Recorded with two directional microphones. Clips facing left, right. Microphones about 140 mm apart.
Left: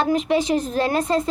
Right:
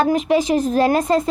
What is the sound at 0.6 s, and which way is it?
Speech, 45° right (ahead or behind).